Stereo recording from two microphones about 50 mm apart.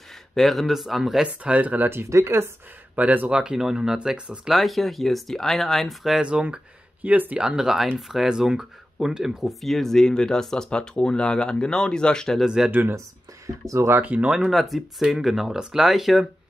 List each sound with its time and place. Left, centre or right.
0.3 s speech: centre
1.2 s speech: right
2.0 s speech: right
3.0 s speech: right
3.5 s speech: centre
4.5 s speech: centre
6.2 s speech: centre
7.0 s speech: right
7.4 s speech: centre
12.4 s speech: centre
13.7 s speech: right
14.0 s speech: right
14.5 s speech: centre